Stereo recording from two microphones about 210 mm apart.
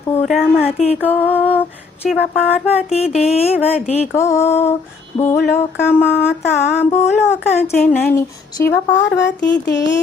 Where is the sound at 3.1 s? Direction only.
30° left (ahead or behind).